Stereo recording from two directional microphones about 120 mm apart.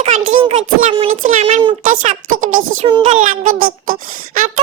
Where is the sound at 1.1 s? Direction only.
90° right.